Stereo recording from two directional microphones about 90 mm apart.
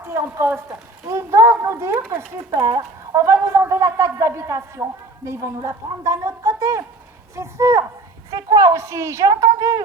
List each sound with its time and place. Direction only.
0.1 s a woman's voice: 30° right (ahead or behind)
2.5 s a woman's voice: 45° right (ahead or behind)